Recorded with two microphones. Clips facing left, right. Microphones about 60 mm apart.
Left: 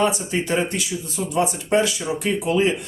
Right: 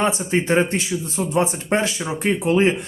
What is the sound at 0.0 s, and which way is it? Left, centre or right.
Speech, right.